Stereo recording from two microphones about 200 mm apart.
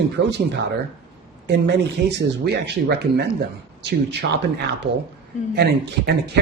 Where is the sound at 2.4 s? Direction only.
55° right (ahead or behind).